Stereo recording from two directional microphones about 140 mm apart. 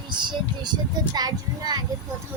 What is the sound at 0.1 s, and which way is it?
A child's voice, 35° right (ahead or behind).